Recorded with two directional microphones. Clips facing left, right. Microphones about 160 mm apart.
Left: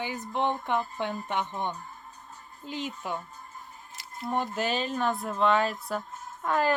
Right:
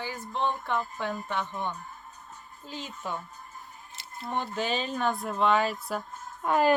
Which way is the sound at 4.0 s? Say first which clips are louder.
Even; 25° right (ahead or behind).